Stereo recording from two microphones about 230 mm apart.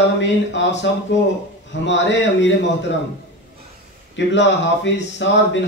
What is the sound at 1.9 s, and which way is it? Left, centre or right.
Speech, left.